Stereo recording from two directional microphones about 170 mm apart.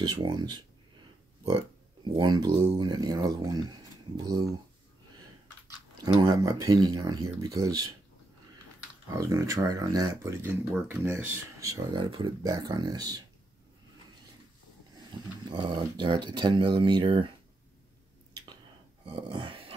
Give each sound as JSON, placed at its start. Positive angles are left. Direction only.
{"t": 0.0, "sound": "speech", "side_deg": -25}
{"t": 2.0, "sound": "speech", "side_deg": -25}
{"t": 6.2, "sound": "speech", "side_deg": -20}
{"t": 9.2, "sound": "speech", "side_deg": -20}
{"t": 11.9, "sound": "speech", "side_deg": -30}
{"t": 15.4, "sound": "speech", "side_deg": -25}
{"t": 18.3, "sound": "a sound", "side_deg": -25}